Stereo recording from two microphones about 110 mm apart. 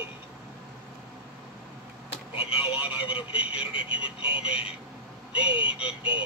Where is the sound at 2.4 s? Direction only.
55° left (ahead or behind).